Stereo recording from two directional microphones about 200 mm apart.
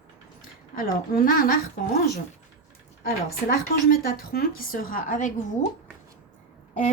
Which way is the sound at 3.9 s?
50° left (ahead or behind).